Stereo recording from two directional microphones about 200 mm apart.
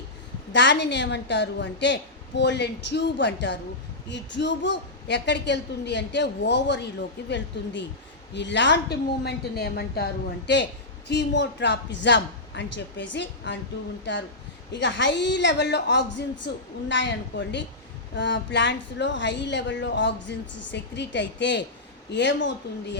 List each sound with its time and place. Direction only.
0.5 s a woman's voice: 60° left (ahead or behind)